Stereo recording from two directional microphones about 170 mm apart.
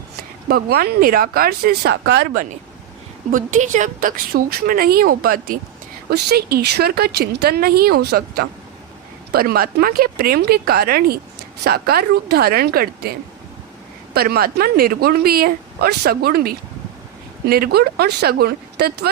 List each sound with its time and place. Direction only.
0.4 s a woman's voice: 65° right (ahead or behind)
3.3 s a woman's voice: 50° right (ahead or behind)
6.1 s a woman's voice: 70° right (ahead or behind)